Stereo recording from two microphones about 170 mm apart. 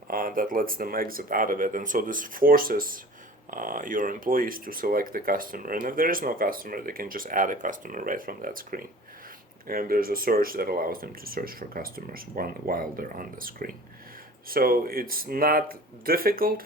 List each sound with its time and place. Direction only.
0.1 s speech: 55° right (ahead or behind)